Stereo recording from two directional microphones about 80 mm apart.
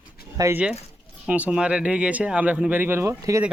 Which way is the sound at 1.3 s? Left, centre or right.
Centre.